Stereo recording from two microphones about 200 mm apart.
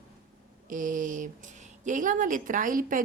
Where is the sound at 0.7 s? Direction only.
40° right (ahead or behind).